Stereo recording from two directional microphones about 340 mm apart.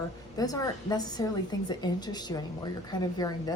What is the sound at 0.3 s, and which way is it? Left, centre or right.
A woman's voice, centre.